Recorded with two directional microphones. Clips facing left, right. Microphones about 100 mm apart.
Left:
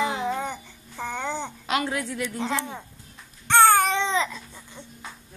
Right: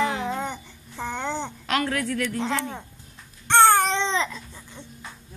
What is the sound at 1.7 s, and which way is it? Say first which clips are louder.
A woman's voice: right 1 dB; 15° left (ahead or behind).